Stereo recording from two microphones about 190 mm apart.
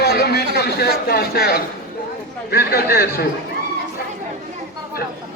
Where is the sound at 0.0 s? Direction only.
60° left (ahead or behind).